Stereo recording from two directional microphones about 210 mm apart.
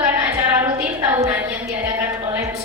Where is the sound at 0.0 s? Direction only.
10° right (ahead or behind).